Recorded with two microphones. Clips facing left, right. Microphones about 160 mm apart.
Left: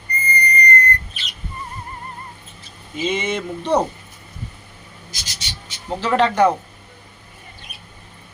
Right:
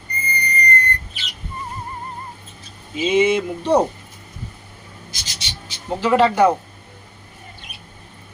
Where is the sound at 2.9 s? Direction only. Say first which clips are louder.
Right 6 dB; 10° right (ahead or behind).